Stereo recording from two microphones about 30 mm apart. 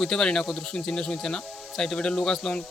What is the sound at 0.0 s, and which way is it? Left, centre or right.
Speech, left.